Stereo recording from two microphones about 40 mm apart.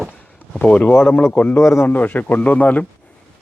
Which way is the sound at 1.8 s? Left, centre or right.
Left.